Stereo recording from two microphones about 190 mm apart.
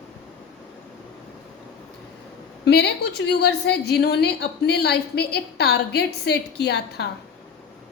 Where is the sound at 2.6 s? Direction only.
60° left (ahead or behind).